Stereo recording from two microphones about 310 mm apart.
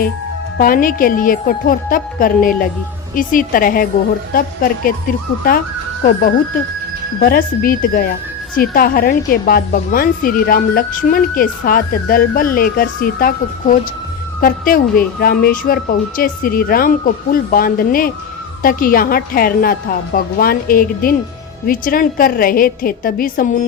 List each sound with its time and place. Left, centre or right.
0.6 s a woman's voice: left
7.2 s a woman's voice: left